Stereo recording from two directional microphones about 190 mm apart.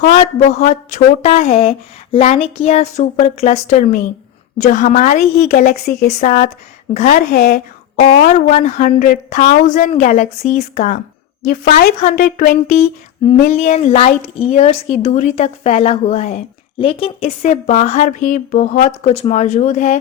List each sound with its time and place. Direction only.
0.0 s a woman's voice: 35° left (ahead or behind)